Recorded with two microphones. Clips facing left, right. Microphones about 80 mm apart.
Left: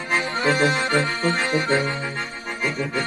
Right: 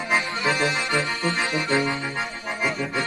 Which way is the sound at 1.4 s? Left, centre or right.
Left.